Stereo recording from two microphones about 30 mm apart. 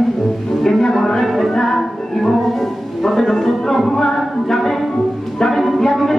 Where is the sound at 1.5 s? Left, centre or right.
Centre.